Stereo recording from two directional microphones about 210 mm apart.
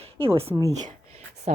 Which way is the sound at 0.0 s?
25° right (ahead or behind).